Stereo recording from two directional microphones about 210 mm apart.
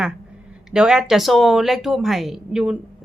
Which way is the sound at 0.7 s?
5° right (ahead or behind).